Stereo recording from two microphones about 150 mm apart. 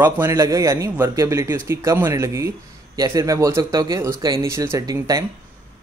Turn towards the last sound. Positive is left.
turn(degrees=-25)  # may be behind; listen again after turning